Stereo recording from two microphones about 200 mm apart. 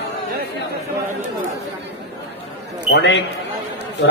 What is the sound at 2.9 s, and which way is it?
Speech, 60° left (ahead or behind).